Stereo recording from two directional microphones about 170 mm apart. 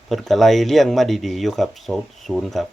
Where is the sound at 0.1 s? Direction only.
Centre (ahead or behind).